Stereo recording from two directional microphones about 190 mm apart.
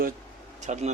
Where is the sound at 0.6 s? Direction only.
40° right (ahead or behind).